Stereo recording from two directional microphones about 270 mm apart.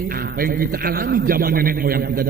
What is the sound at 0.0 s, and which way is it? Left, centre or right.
A man's voice, right.